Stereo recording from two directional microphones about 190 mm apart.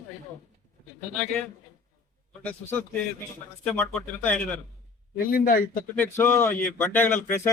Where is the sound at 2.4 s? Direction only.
10° left (ahead or behind).